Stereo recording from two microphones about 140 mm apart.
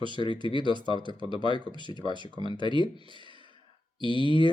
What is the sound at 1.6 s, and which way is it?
Speech, 35° right (ahead or behind).